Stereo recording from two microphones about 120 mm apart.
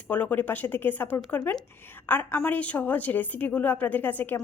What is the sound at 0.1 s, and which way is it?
A woman's voice, 15° left (ahead or behind).